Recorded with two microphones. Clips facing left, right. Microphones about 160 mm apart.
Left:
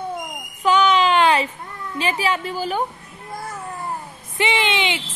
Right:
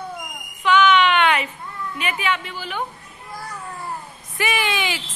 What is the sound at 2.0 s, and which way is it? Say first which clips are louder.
Speech: left 3 dB; 30° left (ahead or behind).